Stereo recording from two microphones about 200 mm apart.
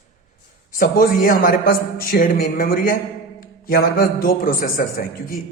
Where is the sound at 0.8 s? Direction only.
45° left (ahead or behind).